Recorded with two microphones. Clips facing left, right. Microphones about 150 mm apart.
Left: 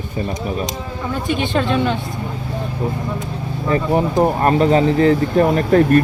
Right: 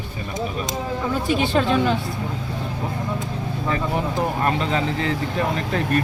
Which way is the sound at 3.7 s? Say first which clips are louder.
Left 7 dB; 40° left (ahead or behind).